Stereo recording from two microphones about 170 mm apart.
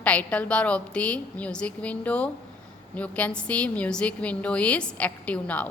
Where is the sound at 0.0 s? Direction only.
10° left (ahead or behind).